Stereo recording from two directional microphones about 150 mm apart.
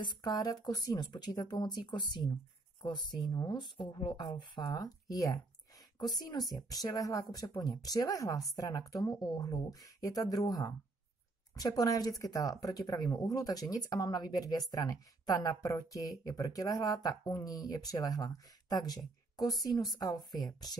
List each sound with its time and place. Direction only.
0.0 s speech: 30° left (ahead or behind)